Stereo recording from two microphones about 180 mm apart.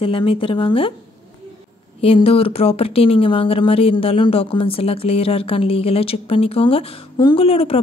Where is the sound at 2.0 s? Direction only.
30° left (ahead or behind).